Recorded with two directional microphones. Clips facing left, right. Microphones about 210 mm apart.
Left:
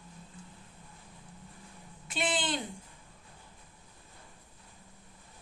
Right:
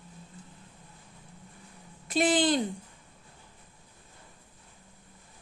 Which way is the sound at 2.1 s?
40° right (ahead or behind).